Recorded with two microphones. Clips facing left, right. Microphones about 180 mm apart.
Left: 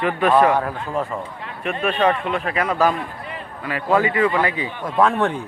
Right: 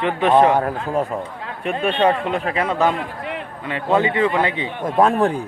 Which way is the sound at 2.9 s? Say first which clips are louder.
Right 3 dB; 85° right.